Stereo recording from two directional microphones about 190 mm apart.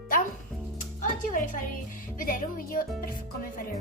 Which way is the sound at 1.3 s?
45° left (ahead or behind).